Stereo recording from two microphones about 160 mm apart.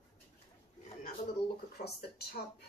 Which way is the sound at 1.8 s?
90° left.